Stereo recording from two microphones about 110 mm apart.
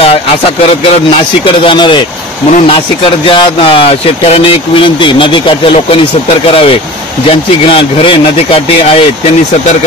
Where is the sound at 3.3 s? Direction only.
55° left (ahead or behind).